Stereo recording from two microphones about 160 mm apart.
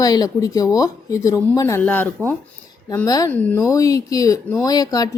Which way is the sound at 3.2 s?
10° left (ahead or behind).